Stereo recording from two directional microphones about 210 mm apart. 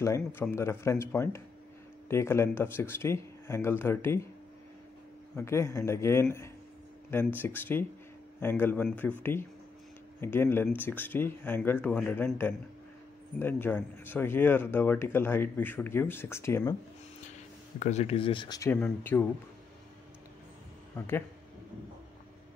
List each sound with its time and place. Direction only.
0.0 s speech: 10° left (ahead or behind)
5.3 s speech: 10° left (ahead or behind)
13.4 s speech: 10° left (ahead or behind)
17.7 s speech: 35° left (ahead or behind); by 19.2 s 10° left (ahead or behind)